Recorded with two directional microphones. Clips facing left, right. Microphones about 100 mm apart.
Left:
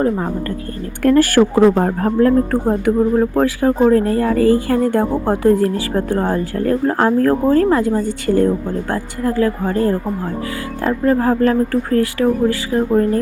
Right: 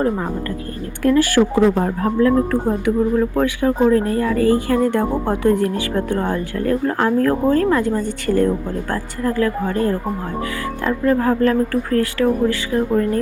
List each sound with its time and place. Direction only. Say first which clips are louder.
1.0 s speech: left 3 dB; 45° left (ahead or behind); by 13.1 s 30° left (ahead or behind)